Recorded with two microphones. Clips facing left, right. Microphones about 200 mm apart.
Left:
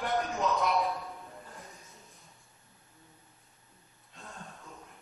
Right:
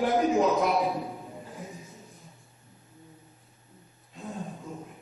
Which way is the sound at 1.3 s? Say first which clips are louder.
Right 7 dB; 15° right (ahead or behind).